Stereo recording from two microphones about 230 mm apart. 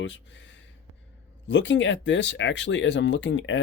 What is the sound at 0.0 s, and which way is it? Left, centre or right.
Speech, left.